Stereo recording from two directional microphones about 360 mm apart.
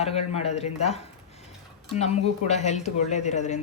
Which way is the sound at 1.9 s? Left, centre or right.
Centre.